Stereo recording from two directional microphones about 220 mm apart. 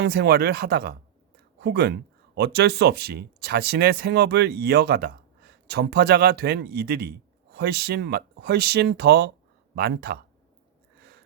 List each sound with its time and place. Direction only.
0.0 s speech: 45° right (ahead or behind)